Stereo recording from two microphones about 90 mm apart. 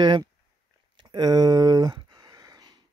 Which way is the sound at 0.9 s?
50° right (ahead or behind).